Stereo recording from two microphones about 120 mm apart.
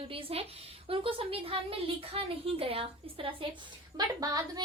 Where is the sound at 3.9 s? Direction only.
35° right (ahead or behind).